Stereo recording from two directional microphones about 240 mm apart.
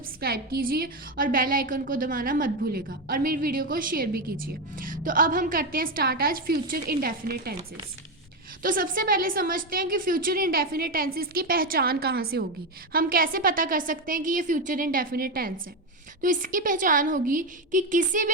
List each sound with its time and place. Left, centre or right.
0.2 s a woman's voice: right
8.6 s a woman's voice: right